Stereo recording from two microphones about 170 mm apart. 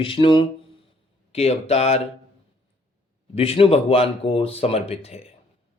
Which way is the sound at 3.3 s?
35° left (ahead or behind).